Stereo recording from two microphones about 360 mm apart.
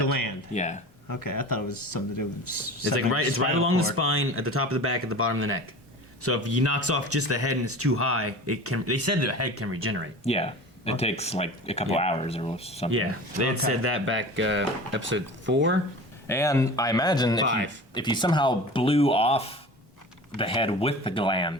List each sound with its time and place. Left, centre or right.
0.5 s speech: centre
1.0 s speech: left
2.9 s speech: right
10.2 s speech: centre
12.9 s speech: right
16.2 s speech: centre
17.4 s speech: right
17.9 s speech: centre